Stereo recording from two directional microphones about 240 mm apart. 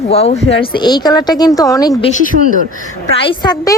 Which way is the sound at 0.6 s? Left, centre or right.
Centre.